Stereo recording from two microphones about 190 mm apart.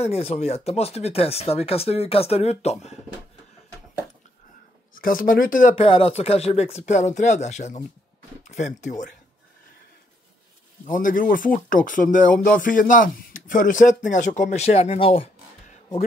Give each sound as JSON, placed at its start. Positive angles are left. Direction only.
{"t": 0.0, "sound": "speech", "side_deg": 30}
{"t": 4.9, "sound": "speech", "side_deg": 50}
{"t": 5.8, "sound": "speech", "side_deg": 30}
{"t": 10.9, "sound": "speech", "side_deg": 45}